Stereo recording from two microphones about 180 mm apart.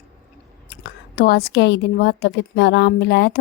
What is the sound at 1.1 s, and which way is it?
A woman's voice, 60° left (ahead or behind).